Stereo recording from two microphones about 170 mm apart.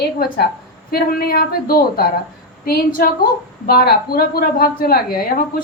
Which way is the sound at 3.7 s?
65° left (ahead or behind).